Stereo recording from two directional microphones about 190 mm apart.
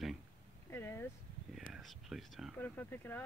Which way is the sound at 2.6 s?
10° left (ahead or behind).